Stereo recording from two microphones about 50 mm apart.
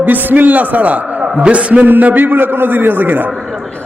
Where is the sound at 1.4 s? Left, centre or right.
Right.